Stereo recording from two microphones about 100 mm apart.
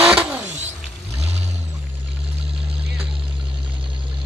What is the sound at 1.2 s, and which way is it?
Vehicle, 90° right.